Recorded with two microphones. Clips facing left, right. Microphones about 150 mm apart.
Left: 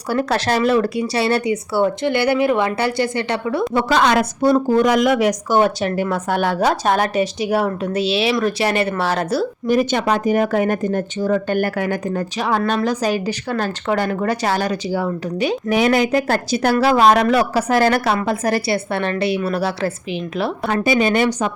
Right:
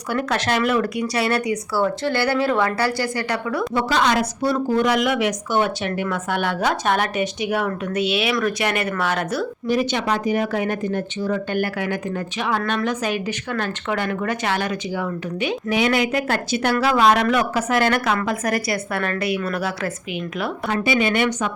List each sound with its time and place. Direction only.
0.1 s speech: 35° left (ahead or behind)
3.8 s a woman's voice: 55° left (ahead or behind)
4.5 s speech: 40° left (ahead or behind)
9.6 s speech: 50° left (ahead or behind); by 19.9 s 30° left (ahead or behind)
20.7 s speech: 45° left (ahead or behind)